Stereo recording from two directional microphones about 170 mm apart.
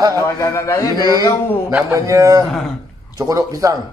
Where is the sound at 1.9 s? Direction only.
20° right (ahead or behind).